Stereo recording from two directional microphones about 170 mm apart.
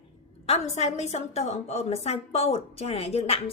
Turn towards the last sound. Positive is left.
turn(degrees=35)  # may be behind; listen again after turning